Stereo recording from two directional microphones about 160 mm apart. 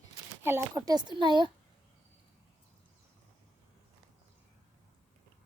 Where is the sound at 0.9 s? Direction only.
30° right (ahead or behind).